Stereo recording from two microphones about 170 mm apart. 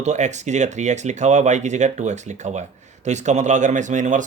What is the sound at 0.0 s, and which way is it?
Speech, 45° right (ahead or behind).